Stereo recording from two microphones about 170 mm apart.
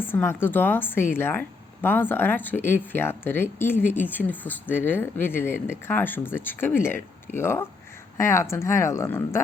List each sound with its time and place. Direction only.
0.0 s a woman's voice: 15° left (ahead or behind)